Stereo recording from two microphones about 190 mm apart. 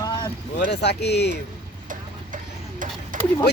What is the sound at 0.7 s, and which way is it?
Speech, 60° left (ahead or behind).